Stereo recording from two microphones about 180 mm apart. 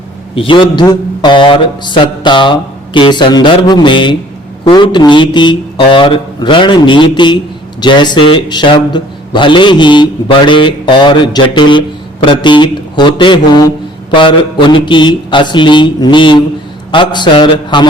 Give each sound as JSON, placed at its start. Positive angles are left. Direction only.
{"t": 0.3, "sound": "speech", "side_deg": 30}